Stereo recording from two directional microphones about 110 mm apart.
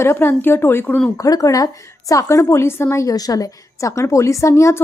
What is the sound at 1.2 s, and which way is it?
A woman's voice, 35° left (ahead or behind).